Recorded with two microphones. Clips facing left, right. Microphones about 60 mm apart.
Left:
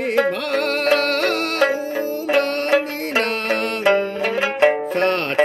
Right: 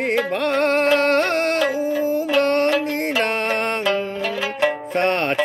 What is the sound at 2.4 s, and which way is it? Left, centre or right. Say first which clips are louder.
Music: right 4 dB; right.